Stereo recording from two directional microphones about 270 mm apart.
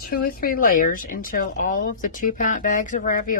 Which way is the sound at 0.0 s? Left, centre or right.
Left.